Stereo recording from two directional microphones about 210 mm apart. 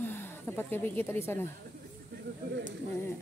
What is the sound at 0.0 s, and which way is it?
A woman's voice, 10° left (ahead or behind).